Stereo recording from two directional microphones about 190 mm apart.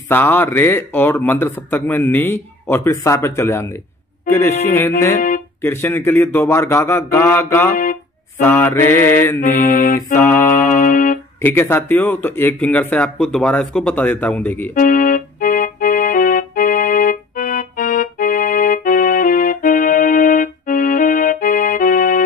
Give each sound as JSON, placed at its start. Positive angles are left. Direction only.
{"t": 0.1, "sound": "speech", "side_deg": 10}
{"t": 7.7, "sound": "speech", "side_deg": 45}
{"t": 8.4, "sound": "speech", "side_deg": 10}
{"t": 9.4, "sound": "mantra", "side_deg": 45}
{"t": 10.1, "sound": "speech", "side_deg": 10}
{"t": 10.7, "sound": "music", "side_deg": 45}
{"t": 11.4, "sound": "speech", "side_deg": 10}
{"t": 14.7, "sound": "keyboard", "side_deg": 45}